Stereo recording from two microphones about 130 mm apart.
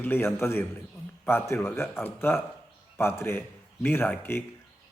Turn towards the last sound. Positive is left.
turn(degrees=15)  # may be behind; listen again after turning